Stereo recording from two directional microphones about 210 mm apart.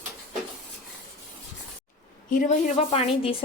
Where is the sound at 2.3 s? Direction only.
35° left (ahead or behind).